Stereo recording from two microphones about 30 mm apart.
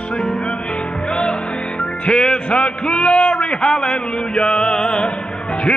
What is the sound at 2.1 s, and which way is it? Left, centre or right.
Music, left.